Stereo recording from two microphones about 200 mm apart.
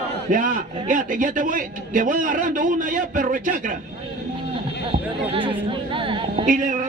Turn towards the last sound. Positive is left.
turn(degrees=-40)  # may be behind; listen again after turning